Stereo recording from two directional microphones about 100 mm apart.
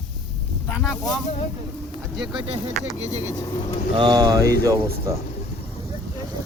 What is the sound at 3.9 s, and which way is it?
Speech, 45° right (ahead or behind).